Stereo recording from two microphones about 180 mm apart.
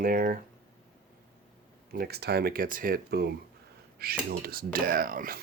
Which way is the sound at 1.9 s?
60° right (ahead or behind).